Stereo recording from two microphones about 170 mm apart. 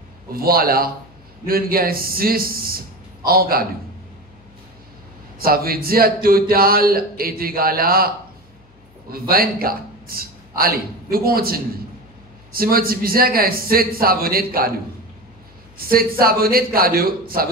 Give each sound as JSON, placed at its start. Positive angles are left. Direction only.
{"t": 0.3, "sound": "speech", "side_deg": -60}
{"t": 5.4, "sound": "speech", "side_deg": -60}
{"t": 9.1, "sound": "a man's voice", "side_deg": -60}
{"t": 15.8, "sound": "speech", "side_deg": -60}